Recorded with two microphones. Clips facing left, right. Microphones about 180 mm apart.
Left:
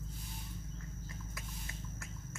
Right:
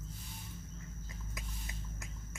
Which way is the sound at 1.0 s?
20° right (ahead or behind).